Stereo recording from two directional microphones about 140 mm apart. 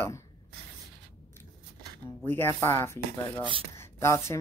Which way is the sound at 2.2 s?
15° left (ahead or behind).